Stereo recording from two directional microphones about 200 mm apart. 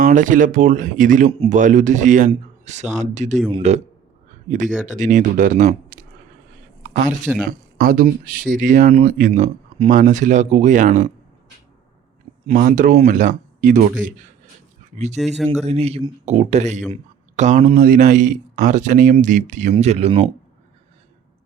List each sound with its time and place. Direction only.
0.0 s speech: 40° right (ahead or behind)
1.3 s speech: 30° right (ahead or behind)
1.5 s speech: 40° right (ahead or behind)
7.4 s speech: 45° right (ahead or behind)
12.5 s speech: 40° right (ahead or behind)
15.2 s speech: centre (ahead or behind)
15.6 s speech: 30° right (ahead or behind)